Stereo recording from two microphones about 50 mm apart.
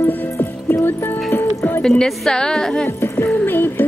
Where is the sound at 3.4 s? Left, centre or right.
Left.